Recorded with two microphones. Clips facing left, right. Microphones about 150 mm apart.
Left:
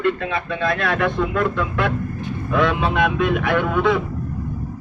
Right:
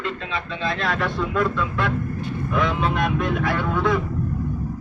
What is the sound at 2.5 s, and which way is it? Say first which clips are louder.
Speech: left 4 dB; 70° left (ahead or behind).